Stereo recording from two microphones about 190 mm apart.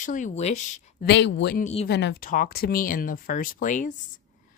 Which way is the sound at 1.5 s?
35° left (ahead or behind).